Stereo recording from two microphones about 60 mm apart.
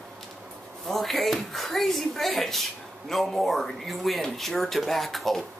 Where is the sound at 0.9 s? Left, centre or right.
Centre.